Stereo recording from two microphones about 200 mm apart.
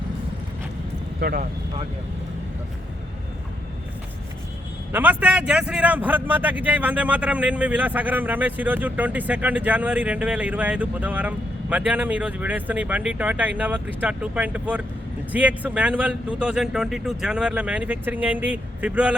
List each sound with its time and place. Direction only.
1.2 s speech: 50° right (ahead or behind)
4.9 s a man's voice: 10° right (ahead or behind)